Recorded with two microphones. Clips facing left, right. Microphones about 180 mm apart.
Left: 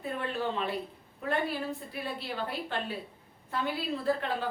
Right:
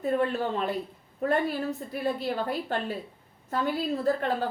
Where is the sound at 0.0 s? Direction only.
45° right (ahead or behind).